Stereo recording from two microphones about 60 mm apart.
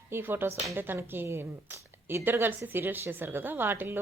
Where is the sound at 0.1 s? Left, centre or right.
Right.